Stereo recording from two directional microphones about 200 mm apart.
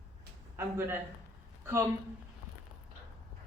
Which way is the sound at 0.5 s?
10° right (ahead or behind).